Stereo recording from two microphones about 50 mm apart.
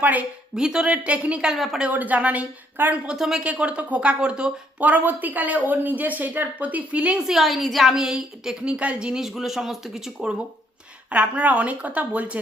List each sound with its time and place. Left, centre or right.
0.0 s speech: right
0.5 s speech: centre
1.5 s a woman's voice: centre
1.9 s speech: right
3.1 s speech: centre
3.4 s speech: right
4.8 s speech: right
7.3 s a woman's voice: centre
8.6 s speech: right
9.2 s speech: centre
11.1 s speech: right